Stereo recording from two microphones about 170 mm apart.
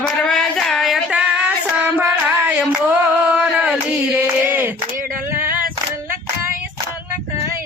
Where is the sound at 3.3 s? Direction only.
10° right (ahead or behind).